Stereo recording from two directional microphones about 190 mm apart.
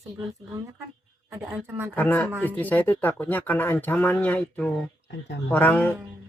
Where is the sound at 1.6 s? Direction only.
15° right (ahead or behind).